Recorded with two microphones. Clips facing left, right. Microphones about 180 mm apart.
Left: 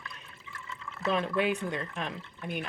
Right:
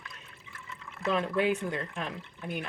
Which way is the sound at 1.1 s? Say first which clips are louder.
Right 1 dB; 30° right (ahead or behind).